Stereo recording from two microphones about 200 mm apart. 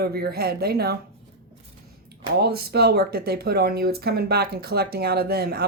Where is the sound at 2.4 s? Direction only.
50° right (ahead or behind).